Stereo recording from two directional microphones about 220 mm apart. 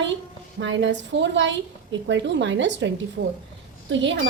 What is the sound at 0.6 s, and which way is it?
Speech, 55° right (ahead or behind).